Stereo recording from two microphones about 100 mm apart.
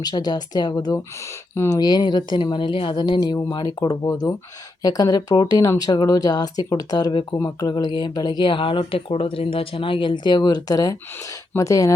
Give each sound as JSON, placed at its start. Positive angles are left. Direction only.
{"t": 0.0, "sound": "speech", "side_deg": 45}
{"t": 1.2, "sound": "speech", "side_deg": 25}
{"t": 1.7, "sound": "speech", "side_deg": 45}
{"t": 7.3, "sound": "speech", "side_deg": 40}